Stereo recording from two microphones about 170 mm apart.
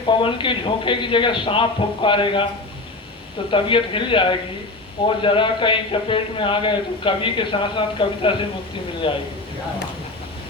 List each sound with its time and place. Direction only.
0.1 s a man's voice: 30° left (ahead or behind)
3.5 s a man's voice: 30° left (ahead or behind)